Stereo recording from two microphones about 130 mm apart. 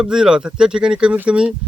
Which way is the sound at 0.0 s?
5° right (ahead or behind).